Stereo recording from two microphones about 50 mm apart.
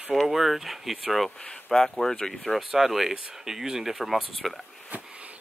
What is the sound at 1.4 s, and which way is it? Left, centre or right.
Speech, centre.